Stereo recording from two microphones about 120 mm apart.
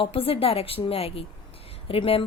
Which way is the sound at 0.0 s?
50° left (ahead or behind).